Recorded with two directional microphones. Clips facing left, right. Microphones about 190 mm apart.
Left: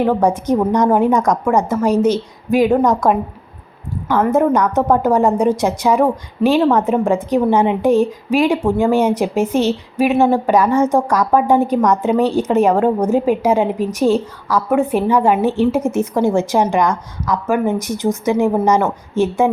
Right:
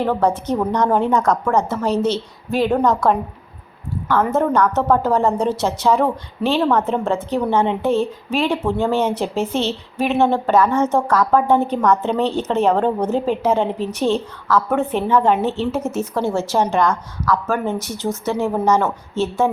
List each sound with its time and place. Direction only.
0.0 s a woman's voice: 10° left (ahead or behind)
4.3 s a woman's voice: 15° left (ahead or behind)